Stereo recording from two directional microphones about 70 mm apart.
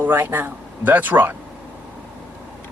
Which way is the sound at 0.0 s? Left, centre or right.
Right.